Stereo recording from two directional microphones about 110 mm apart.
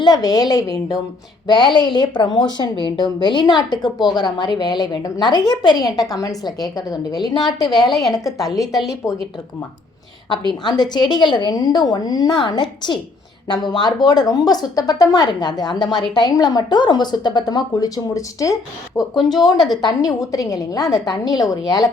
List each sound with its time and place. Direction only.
0.0 s a woman's voice: 35° left (ahead or behind)
7.9 s a woman's voice: centre (ahead or behind)
10.6 s speech: 40° left (ahead or behind)
19.5 s a woman's voice: centre (ahead or behind)
19.8 s speech: 35° left (ahead or behind)